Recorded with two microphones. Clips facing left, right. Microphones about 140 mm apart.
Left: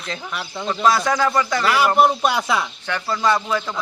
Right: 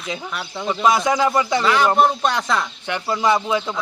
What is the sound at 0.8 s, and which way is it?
Speech, 20° right (ahead or behind).